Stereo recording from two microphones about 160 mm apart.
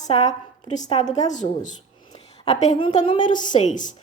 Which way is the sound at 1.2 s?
50° left (ahead or behind).